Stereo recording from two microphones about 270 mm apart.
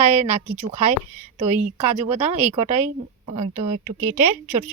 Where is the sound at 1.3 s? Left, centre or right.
Right.